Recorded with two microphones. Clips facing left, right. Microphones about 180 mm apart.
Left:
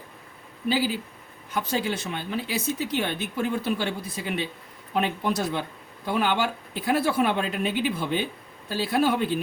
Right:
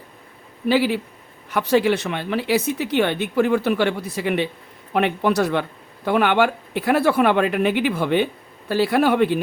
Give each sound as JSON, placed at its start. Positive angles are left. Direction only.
{"t": 0.7, "sound": "speech", "side_deg": -70}